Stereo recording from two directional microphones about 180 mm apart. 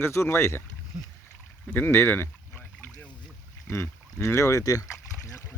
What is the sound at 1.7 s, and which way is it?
Boat, 10° left (ahead or behind).